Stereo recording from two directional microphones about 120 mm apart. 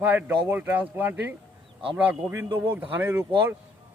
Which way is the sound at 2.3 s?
25° right (ahead or behind).